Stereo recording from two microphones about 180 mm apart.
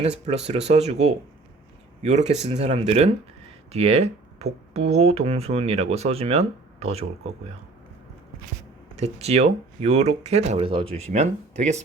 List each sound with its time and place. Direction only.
0.0 s speech: 35° right (ahead or behind)
9.0 s speech: 35° right (ahead or behind)